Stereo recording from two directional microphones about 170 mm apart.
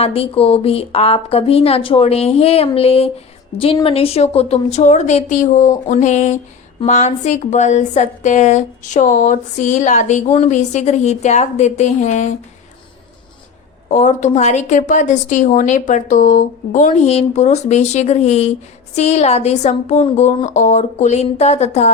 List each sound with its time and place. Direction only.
0.0 s a woman's voice: 35° left (ahead or behind)
13.9 s a woman's voice: 45° left (ahead or behind)